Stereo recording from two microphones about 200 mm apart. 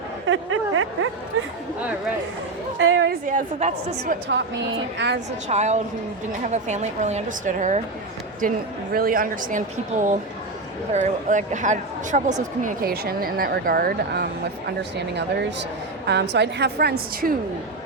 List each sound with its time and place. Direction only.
0.3 s a sound: 80° right
2.7 s a woman's voice: 70° right (ahead or behind)
3.1 s a woman's voice: 40° right (ahead or behind)
4.9 s a woman's voice: 60° right (ahead or behind)
5.5 s a woman's voice: 35° right (ahead or behind)